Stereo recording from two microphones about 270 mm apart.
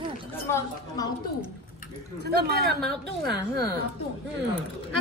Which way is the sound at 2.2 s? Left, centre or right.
Right.